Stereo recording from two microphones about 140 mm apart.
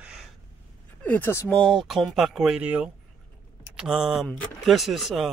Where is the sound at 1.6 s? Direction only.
Centre (ahead or behind).